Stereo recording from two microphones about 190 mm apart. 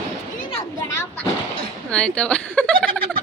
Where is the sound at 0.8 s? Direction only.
15° left (ahead or behind).